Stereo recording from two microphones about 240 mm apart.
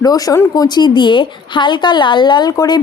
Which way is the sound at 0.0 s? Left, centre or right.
Centre.